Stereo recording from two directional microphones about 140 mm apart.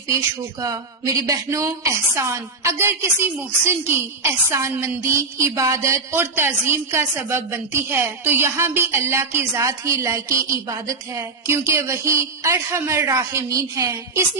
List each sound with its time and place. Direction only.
0.6 s a woman's voice: 25° right (ahead or behind)